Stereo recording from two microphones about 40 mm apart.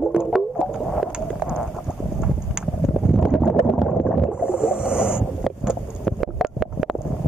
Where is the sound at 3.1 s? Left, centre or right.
Centre.